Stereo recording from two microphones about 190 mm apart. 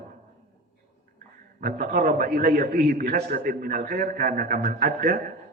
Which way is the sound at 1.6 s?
50° right (ahead or behind).